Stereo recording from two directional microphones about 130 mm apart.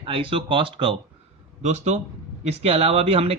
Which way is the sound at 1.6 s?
60° right (ahead or behind).